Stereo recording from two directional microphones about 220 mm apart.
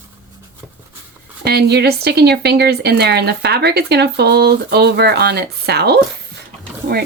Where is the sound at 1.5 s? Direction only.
45° right (ahead or behind).